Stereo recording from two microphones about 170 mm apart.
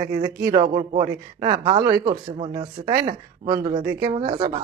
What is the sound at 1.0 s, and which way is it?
Speech, 25° right (ahead or behind).